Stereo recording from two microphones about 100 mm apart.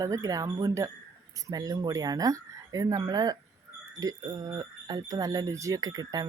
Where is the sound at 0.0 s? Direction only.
35° right (ahead or behind).